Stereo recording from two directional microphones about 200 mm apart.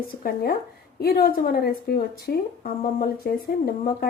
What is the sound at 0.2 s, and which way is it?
Speech, 50° left (ahead or behind).